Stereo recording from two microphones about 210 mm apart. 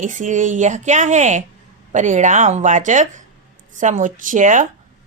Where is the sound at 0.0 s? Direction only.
35° right (ahead or behind).